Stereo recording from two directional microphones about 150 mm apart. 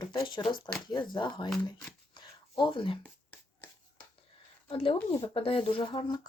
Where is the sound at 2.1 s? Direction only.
30° left (ahead or behind).